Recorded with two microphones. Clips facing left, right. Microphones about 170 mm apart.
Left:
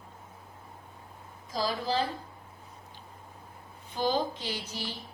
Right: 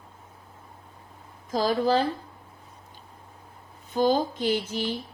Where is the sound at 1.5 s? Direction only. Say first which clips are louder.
Right 8 dB; 50° right (ahead or behind).